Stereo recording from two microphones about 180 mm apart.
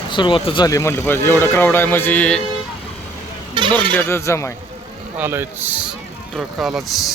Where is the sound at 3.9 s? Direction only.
15° left (ahead or behind).